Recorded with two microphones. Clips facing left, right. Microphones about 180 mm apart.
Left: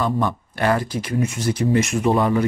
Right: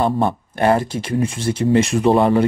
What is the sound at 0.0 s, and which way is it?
Speech, 25° right (ahead or behind).